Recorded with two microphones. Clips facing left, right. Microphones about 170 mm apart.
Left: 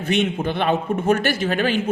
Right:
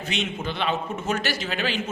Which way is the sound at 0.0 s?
55° left (ahead or behind).